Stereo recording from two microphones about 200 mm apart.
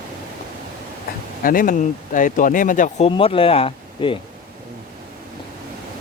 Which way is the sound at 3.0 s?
25° left (ahead or behind).